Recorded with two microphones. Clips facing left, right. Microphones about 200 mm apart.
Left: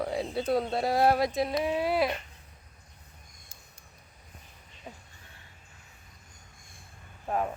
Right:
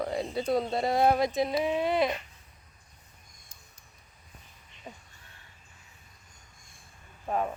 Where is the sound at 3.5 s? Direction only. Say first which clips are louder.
Left 2 dB; 25° left (ahead or behind).